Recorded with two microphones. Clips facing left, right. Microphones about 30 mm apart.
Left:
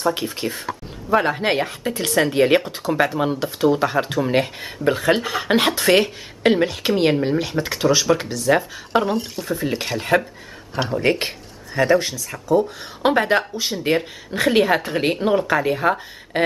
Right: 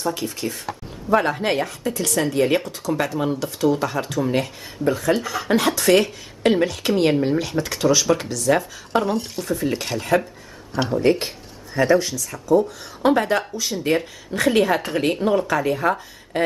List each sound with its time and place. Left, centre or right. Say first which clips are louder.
0.0 s speech: left 3 dB; left
1.1 s speech: left 1 dB; centre
1.5 s speech: left 1 dB; left
10.7 s speech: right 1 dB; centre
11.1 s speech: right 1 dB; left